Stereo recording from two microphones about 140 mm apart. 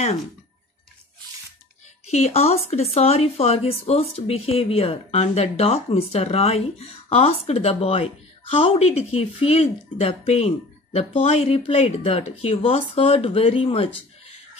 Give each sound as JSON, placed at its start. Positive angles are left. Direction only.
{"t": 2.0, "sound": "speech", "side_deg": 50}